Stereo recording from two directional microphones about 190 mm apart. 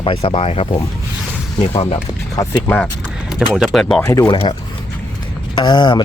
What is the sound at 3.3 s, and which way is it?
Speech, centre (ahead or behind).